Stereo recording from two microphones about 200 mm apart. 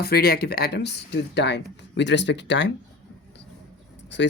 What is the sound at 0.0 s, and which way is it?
Speech, 50° left (ahead or behind).